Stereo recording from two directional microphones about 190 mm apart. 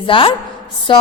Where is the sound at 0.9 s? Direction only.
25° left (ahead or behind).